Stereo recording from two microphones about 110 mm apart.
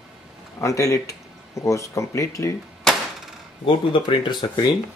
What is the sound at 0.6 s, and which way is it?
Speech, 30° left (ahead or behind).